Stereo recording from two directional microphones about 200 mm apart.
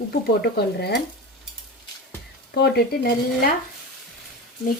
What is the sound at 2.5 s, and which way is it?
Dishes, 55° left (ahead or behind).